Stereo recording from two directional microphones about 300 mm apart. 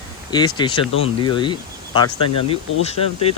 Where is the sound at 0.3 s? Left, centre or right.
Centre.